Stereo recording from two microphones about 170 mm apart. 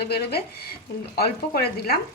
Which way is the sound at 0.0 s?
70° left (ahead or behind).